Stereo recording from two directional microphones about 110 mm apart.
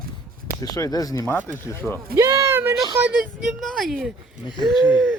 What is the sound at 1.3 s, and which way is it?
Speech, 15° left (ahead or behind).